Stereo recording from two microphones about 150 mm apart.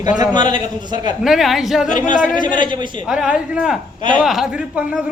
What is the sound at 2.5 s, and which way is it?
Speech, 30° right (ahead or behind).